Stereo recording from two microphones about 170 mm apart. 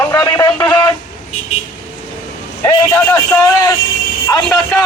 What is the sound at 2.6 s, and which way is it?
Speech, 15° left (ahead or behind).